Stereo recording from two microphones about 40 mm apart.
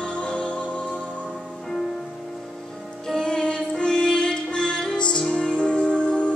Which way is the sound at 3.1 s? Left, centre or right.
Centre.